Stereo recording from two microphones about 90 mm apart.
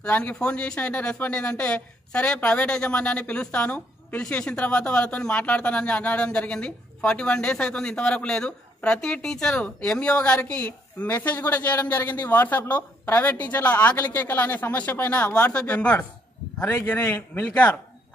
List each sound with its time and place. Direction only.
0.0 s a woman's voice: 15° left (ahead or behind)
17.3 s speech: 20° left (ahead or behind)